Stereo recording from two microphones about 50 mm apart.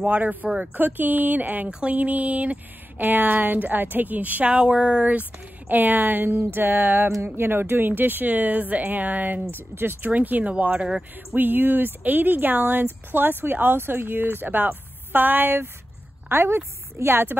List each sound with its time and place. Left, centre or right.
0.0 s speech: right
1.7 s a sound: right
2.0 s speech: right
10.1 s speech: right
11.3 s a woman's voice: right